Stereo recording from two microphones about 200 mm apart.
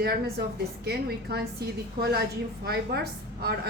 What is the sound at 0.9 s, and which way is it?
A woman's voice, 55° right (ahead or behind).